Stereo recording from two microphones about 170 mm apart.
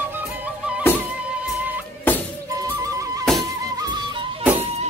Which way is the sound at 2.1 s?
10° left (ahead or behind).